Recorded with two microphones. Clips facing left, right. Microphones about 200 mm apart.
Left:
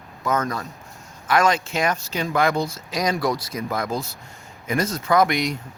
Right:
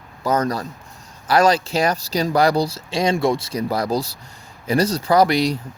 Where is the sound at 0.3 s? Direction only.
35° right (ahead or behind).